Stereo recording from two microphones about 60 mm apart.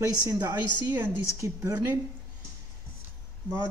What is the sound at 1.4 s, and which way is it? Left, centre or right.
Speech, right.